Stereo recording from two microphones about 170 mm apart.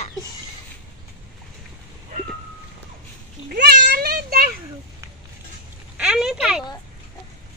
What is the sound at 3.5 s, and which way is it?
A child's voice, 70° right (ahead or behind).